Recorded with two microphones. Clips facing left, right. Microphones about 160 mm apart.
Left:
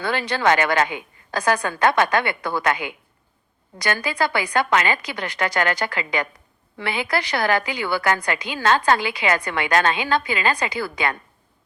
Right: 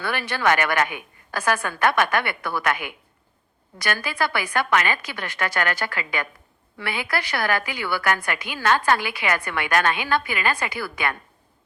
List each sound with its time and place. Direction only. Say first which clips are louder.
0.0 s a woman's voice: left 2 dB; 15° left (ahead or behind)